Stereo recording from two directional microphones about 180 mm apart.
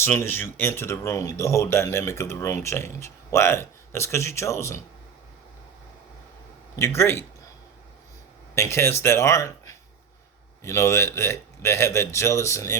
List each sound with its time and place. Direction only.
0.0 s speech: 15° left (ahead or behind)
6.7 s speech: 15° left (ahead or behind)
8.5 s speech: 15° left (ahead or behind)